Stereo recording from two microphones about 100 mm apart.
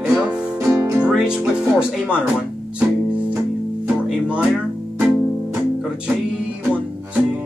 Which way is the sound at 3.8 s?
10° right (ahead or behind).